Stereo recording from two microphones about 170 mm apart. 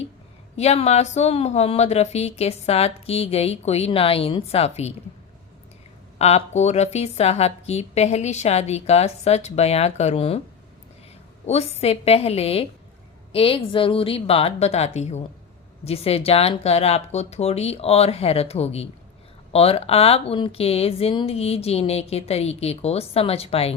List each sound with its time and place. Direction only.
0.5 s speech: 40° left (ahead or behind)
6.1 s speech: 40° left (ahead or behind)
11.4 s speech: 40° left (ahead or behind)